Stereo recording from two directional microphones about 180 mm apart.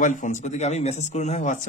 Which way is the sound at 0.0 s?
45° left (ahead or behind).